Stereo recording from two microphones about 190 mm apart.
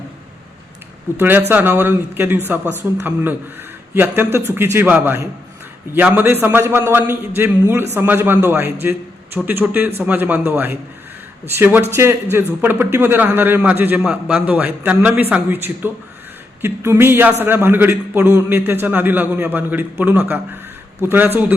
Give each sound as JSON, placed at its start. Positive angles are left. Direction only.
{"t": 1.1, "sound": "a man's voice", "side_deg": -10}